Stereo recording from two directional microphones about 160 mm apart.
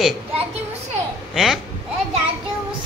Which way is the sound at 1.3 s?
Centre (ahead or behind).